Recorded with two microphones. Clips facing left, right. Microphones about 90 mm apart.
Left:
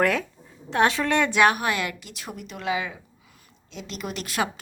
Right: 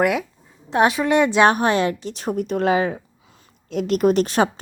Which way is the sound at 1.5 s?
35° right (ahead or behind).